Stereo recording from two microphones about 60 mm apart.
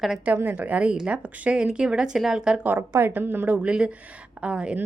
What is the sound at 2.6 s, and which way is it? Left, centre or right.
A woman's voice, right.